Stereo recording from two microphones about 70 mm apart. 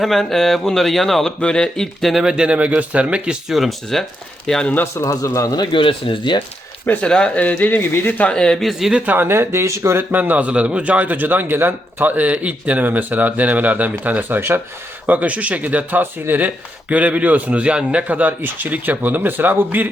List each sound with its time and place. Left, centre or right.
0.0 s speech: centre
2.2 s speech: centre
3.5 s speech: centre
4.7 s a man's voice: left
5.0 s speech: left
7.0 s speech: centre
8.3 s speech: centre
8.9 s speech: centre
9.1 s speech: right